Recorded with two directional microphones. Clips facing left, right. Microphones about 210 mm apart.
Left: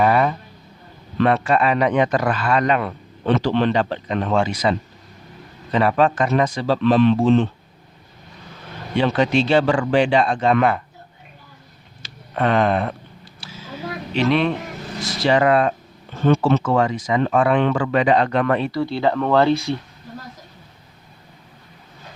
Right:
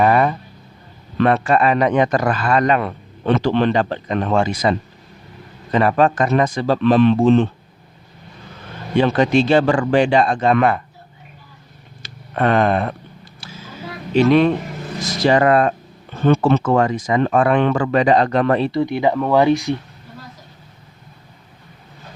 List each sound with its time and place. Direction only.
0.0 s a sound: 45° right (ahead or behind)
1.2 s a man's voice: 45° right (ahead or behind)
5.7 s a man's voice: 45° right (ahead or behind)
9.0 s a man's voice: 45° right (ahead or behind)
12.0 s speech: 50° right (ahead or behind)
14.1 s a man's voice: 45° right (ahead or behind)
18.8 s speech: 15° right (ahead or behind)